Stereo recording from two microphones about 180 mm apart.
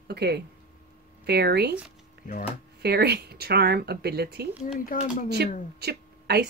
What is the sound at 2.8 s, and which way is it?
Speech, 65° right (ahead or behind).